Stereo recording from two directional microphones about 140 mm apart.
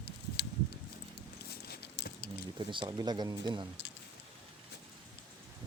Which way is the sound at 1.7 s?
90° left.